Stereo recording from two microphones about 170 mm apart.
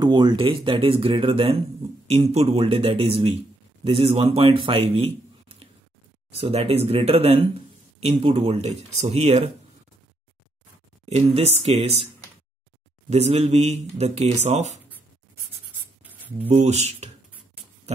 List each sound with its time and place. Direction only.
0.0 s a man's voice: 25° right (ahead or behind)
11.1 s speech: 35° right (ahead or behind)
13.1 s speech: 40° right (ahead or behind)
16.0 s a sound: 10° right (ahead or behind)
16.4 s speech: 35° right (ahead or behind)